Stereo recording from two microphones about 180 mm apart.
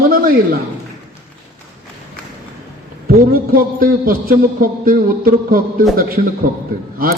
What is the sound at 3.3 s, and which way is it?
Speech, 55° right (ahead or behind).